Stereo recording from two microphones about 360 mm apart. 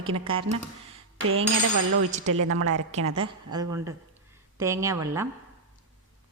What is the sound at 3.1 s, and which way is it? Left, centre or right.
A woman's voice, centre.